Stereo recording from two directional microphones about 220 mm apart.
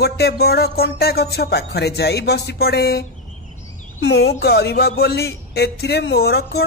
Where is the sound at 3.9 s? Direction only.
70° left (ahead or behind).